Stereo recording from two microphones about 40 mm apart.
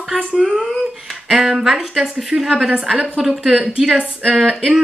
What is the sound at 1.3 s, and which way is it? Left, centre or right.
A woman's voice, centre.